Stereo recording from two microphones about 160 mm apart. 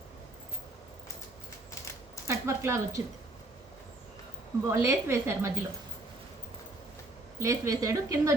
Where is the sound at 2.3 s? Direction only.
20° right (ahead or behind).